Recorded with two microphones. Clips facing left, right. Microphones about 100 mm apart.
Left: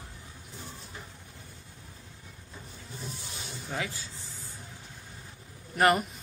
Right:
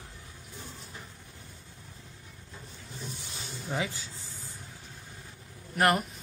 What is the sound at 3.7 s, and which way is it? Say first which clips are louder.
Speech: right 2 dB; 20° right (ahead or behind).